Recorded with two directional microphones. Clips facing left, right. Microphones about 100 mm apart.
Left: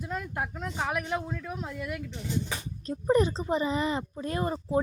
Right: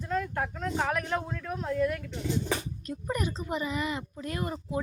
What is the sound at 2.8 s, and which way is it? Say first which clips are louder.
Speech: left 8 dB; 30° left (ahead or behind).